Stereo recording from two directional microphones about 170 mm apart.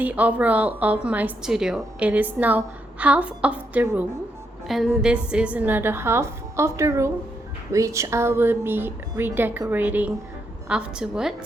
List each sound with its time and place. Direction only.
0.0 s a woman's voice: 10° right (ahead or behind)